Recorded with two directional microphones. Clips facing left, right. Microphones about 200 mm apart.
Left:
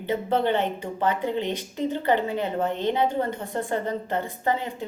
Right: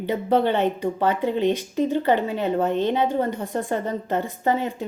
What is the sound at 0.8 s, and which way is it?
Speech, 20° left (ahead or behind).